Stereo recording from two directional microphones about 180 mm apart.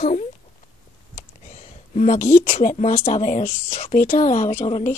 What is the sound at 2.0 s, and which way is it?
Speech, 40° left (ahead or behind).